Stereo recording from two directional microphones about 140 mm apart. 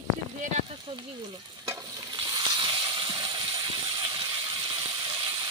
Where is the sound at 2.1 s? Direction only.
35° right (ahead or behind).